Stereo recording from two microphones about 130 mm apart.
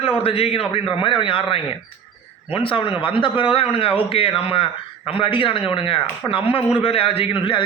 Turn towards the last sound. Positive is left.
turn(degrees=40)  # may be behind; listen again after turning